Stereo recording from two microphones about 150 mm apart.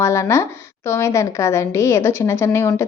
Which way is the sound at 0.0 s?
20° left (ahead or behind).